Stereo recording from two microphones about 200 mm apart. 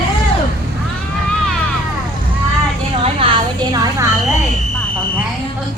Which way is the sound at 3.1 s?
25° right (ahead or behind).